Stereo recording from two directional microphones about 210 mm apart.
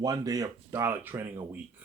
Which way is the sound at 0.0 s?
15° right (ahead or behind).